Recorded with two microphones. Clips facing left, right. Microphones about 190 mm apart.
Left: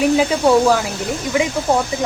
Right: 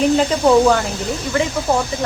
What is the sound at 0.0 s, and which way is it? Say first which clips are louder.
Speech: even; 5° left (ahead or behind).